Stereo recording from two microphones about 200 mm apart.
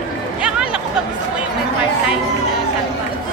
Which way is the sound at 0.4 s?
5° right (ahead or behind).